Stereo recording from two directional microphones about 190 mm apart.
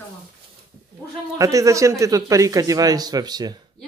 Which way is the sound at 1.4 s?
15° right (ahead or behind).